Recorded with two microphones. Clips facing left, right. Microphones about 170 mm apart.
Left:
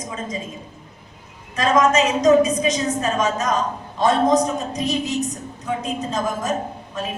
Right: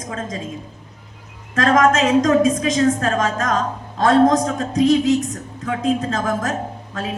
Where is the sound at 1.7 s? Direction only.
90° right.